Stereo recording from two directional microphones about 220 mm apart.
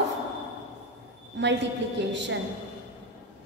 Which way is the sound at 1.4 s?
55° right (ahead or behind).